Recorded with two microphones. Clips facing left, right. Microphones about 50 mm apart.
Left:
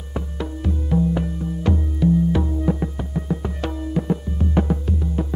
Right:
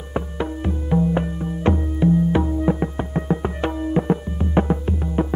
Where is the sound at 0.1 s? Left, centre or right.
Right.